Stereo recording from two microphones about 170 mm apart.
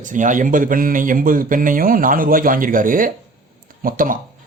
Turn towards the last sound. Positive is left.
turn(degrees=-55)  # may be behind; listen again after turning